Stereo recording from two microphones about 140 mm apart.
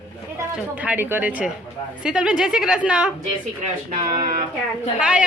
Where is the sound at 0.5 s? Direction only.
10° right (ahead or behind).